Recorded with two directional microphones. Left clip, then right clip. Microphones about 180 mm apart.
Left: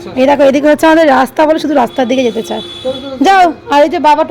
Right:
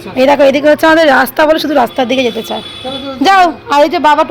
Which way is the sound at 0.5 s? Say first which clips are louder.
Even; 30° left (ahead or behind).